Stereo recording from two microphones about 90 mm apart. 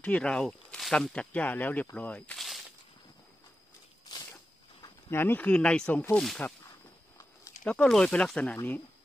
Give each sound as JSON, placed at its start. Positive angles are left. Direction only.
{"t": 0.0, "sound": "speech", "side_deg": 10}
{"t": 2.3, "sound": "a sound", "side_deg": 0}
{"t": 5.1, "sound": "speech", "side_deg": 20}
{"t": 7.6, "sound": "speech", "side_deg": 10}